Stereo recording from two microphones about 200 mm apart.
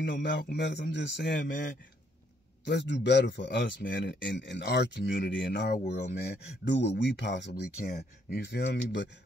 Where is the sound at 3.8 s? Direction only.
45° left (ahead or behind).